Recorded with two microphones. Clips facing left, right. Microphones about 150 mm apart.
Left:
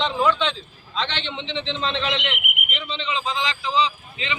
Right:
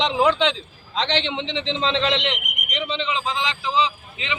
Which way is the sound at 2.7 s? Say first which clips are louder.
Right 4 dB; 15° right (ahead or behind).